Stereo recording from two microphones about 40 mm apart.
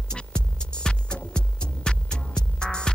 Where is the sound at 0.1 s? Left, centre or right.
Centre.